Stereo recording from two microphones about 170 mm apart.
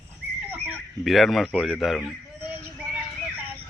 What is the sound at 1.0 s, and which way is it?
Speech, centre (ahead or behind).